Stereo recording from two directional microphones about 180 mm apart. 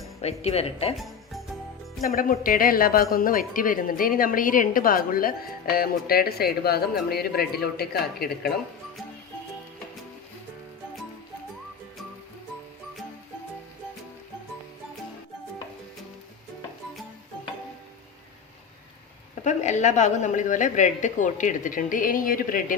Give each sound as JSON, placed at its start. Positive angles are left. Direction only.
{"t": 0.2, "sound": "speech", "side_deg": 35}
{"t": 0.9, "sound": "music", "side_deg": 0}
{"t": 2.0, "sound": "speech", "side_deg": 50}
{"t": 19.5, "sound": "speech", "side_deg": 40}